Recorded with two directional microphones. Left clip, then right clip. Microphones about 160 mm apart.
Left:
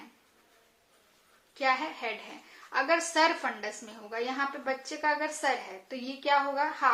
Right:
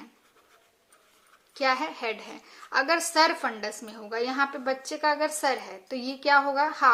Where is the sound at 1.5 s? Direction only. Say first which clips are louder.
Right 3 dB; 35° right (ahead or behind).